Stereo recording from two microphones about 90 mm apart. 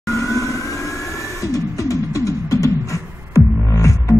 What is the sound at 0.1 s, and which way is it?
Vehicle, 35° left (ahead or behind).